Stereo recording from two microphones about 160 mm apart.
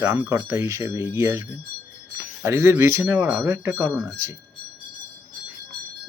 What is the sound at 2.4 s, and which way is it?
Speech, 15° right (ahead or behind).